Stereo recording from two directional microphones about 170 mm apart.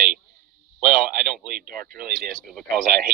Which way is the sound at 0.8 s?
60° right (ahead or behind).